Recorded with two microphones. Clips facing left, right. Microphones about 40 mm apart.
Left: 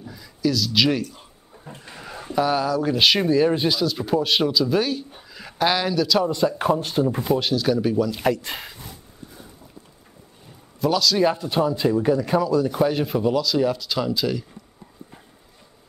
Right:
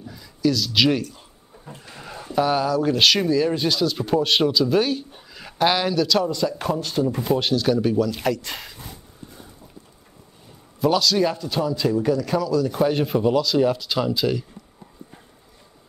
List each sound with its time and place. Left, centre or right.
0.0 s speech: centre
1.1 s a sound: centre
2.3 s speech: centre
3.7 s speech: centre
6.5 s speech: centre
7.2 s speech: centre
10.8 s speech: centre
11.2 s a man's voice: left
12.8 s speech: centre